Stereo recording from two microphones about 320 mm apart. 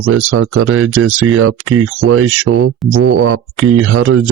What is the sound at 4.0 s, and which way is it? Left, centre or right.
Speech, right.